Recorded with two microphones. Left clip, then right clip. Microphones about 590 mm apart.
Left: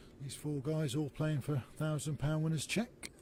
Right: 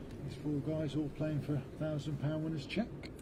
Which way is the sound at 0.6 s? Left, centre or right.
Left.